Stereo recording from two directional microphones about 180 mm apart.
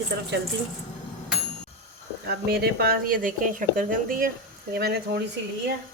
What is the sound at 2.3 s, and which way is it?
A woman's voice, 60° right (ahead or behind).